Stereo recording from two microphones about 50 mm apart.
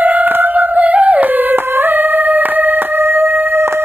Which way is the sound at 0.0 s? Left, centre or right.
Right.